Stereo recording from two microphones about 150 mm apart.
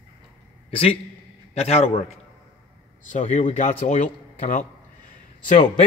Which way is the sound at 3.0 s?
50° left (ahead or behind).